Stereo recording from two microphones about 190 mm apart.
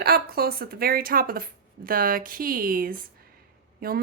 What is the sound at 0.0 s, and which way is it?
Speech, 55° right (ahead or behind).